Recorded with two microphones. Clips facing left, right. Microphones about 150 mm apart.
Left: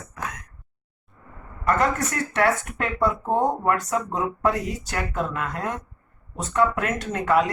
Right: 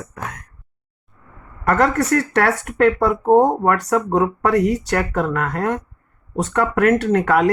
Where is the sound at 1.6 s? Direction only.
70° right (ahead or behind).